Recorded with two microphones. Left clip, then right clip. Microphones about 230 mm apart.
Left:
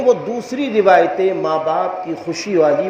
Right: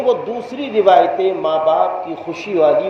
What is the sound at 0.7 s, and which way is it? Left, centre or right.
Speech, left.